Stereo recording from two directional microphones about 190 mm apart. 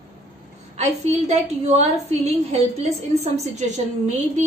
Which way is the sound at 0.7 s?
35° right (ahead or behind).